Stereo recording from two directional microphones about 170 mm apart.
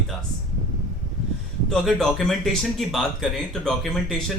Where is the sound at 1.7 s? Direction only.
Centre (ahead or behind).